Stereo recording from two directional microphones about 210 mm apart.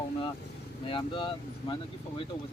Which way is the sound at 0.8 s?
25° left (ahead or behind).